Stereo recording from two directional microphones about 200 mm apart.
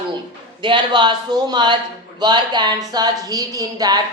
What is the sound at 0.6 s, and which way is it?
A woman's voice, 25° right (ahead or behind).